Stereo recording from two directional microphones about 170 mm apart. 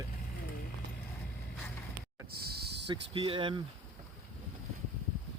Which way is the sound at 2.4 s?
65° right (ahead or behind).